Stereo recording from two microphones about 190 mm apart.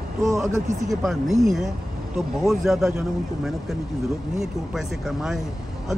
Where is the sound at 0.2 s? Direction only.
Centre (ahead or behind).